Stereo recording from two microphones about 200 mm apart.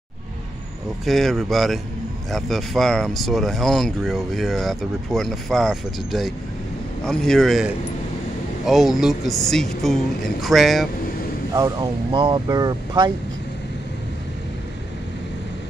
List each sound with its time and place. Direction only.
1.0 s speech: centre (ahead or behind)
11.5 s speech: 15° right (ahead or behind)